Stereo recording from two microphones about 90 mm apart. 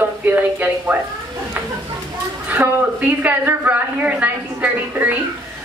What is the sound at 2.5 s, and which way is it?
A woman's voice, 20° right (ahead or behind).